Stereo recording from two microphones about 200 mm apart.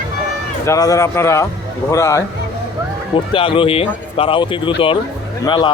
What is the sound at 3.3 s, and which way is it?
Speech, 25° left (ahead or behind).